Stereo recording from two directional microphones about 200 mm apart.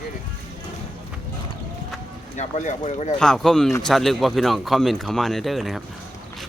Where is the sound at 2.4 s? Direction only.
35° left (ahead or behind).